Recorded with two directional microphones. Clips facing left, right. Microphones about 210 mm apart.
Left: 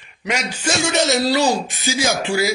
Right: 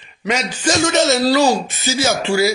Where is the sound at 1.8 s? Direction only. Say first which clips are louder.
Right 2 dB; 15° left (ahead or behind).